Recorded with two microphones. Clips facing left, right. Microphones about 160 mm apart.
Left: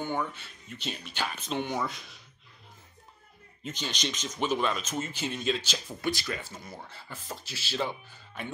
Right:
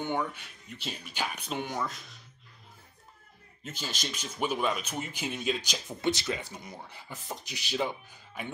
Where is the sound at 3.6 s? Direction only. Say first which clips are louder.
Left 3 dB; 5° right (ahead or behind).